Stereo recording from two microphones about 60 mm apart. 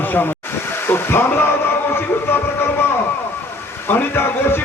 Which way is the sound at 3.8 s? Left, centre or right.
Left.